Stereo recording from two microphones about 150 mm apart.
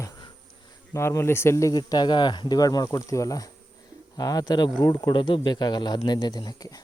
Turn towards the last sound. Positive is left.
turn(degrees=25)  # may be behind; listen again after turning